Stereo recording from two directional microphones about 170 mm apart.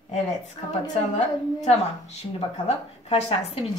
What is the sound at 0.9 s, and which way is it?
A woman's voice, 40° left (ahead or behind).